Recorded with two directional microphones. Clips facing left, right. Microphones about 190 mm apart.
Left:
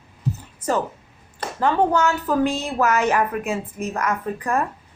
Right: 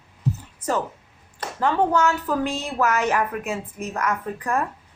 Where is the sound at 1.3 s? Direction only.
30° left (ahead or behind).